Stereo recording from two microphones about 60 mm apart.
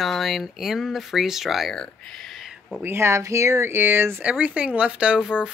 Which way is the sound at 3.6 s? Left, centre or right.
Right.